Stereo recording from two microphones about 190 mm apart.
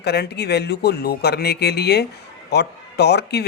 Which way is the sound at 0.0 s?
60° left (ahead or behind).